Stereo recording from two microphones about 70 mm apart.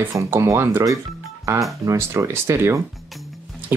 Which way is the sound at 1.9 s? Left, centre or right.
Right.